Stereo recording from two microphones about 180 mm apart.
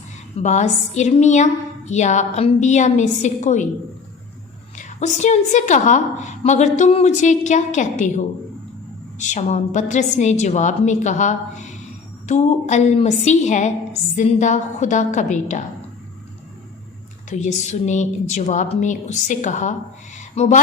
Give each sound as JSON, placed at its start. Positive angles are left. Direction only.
{"t": 0.4, "sound": "a woman's voice", "side_deg": 40}
{"t": 4.8, "sound": "a woman's voice", "side_deg": 40}
{"t": 17.2, "sound": "a woman's voice", "side_deg": 40}
{"t": 20.1, "sound": "a sound", "side_deg": 40}